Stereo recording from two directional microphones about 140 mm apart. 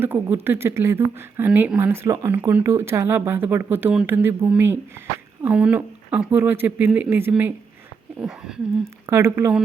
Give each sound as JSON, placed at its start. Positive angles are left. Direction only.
{"t": 0.0, "sound": "a woman's voice", "side_deg": -15}
{"t": 9.0, "sound": "speech", "side_deg": -20}